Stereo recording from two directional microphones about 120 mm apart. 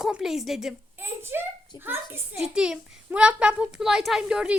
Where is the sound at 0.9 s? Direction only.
20° right (ahead or behind).